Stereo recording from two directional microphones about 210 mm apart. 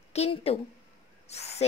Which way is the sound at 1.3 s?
30° left (ahead or behind).